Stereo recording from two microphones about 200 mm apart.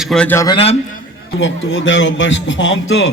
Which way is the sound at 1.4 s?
70° left (ahead or behind).